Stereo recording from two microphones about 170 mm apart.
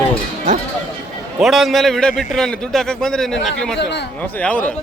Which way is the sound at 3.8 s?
90° left.